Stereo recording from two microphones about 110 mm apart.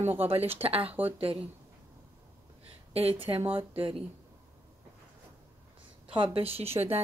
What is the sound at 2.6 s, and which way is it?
Speech, 60° right (ahead or behind).